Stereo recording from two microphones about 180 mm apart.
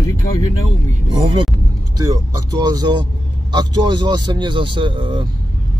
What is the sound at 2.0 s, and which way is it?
Speech, 20° right (ahead or behind).